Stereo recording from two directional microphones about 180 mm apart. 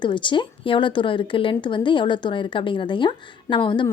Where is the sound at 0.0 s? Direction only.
25° left (ahead or behind).